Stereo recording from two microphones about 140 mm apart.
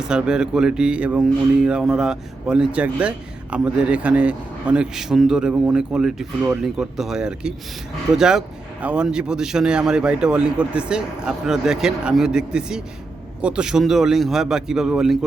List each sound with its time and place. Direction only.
0.0 s speech: 5° right (ahead or behind)